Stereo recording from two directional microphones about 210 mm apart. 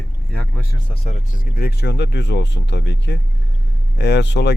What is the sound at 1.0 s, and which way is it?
Speech, 35° left (ahead or behind).